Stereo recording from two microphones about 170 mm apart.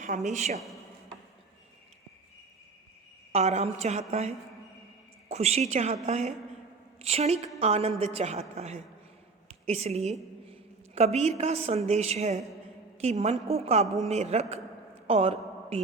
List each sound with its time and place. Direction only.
0.0 s a woman's voice: 45° right (ahead or behind)
3.3 s a woman's voice: 40° right (ahead or behind)
15.0 s a sound: 35° right (ahead or behind)